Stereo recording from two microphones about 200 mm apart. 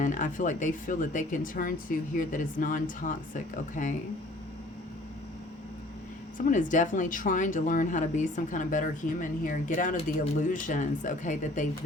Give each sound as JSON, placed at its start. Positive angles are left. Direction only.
{"t": 0.0, "sound": "speech", "side_deg": 40}
{"t": 6.3, "sound": "speech", "side_deg": 40}